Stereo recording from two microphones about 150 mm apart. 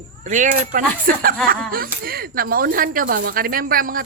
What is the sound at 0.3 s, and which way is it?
Speech, 60° right (ahead or behind).